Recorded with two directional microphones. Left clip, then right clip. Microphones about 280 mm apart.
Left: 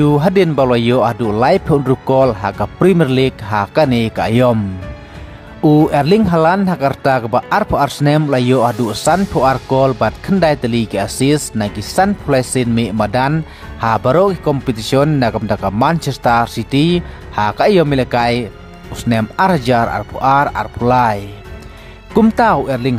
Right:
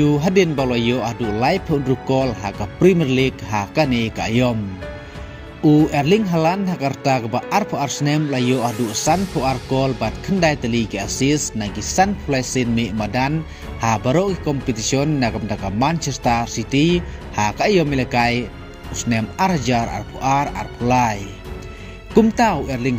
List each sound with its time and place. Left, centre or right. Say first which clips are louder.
0.0 s speech: left 4 dB; left
5.9 s speech: left 5 dB; centre